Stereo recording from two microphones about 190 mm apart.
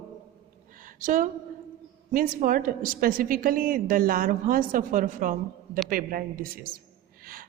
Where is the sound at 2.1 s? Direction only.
45° right (ahead or behind).